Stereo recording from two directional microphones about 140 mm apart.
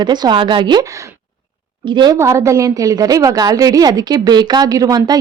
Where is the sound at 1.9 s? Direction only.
35° right (ahead or behind).